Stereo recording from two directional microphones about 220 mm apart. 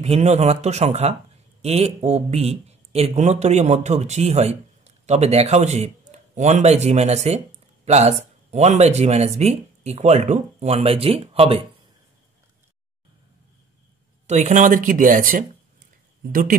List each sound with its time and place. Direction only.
0.0 s speech: 30° right (ahead or behind)
14.2 s speech: 30° right (ahead or behind)